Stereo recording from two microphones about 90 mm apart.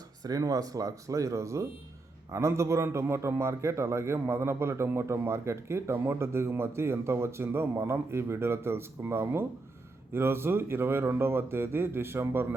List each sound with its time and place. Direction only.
0.2 s a man's voice: 45° right (ahead or behind); by 12.5 s 25° right (ahead or behind)